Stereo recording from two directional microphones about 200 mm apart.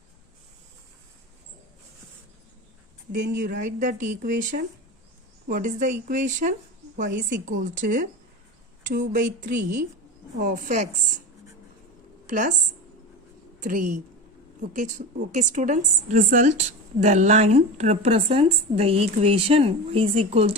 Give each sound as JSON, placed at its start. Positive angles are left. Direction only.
{"t": 3.1, "sound": "a woman's voice", "side_deg": -45}
{"t": 12.3, "sound": "a woman's voice", "side_deg": -40}
{"t": 13.7, "sound": "a woman's voice", "side_deg": -40}